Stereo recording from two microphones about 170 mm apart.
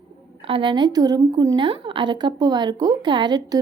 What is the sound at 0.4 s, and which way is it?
A woman's voice, 30° right (ahead or behind).